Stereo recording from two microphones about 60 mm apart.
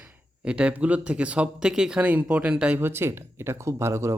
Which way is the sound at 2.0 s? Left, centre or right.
Right.